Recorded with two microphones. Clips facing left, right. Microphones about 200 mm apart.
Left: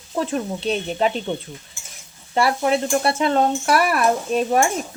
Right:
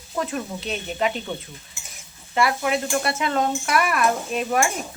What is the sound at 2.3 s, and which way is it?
Stir, 35° left (ahead or behind).